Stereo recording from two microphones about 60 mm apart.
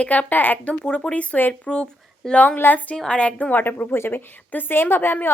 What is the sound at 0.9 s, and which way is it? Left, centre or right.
Speech, centre.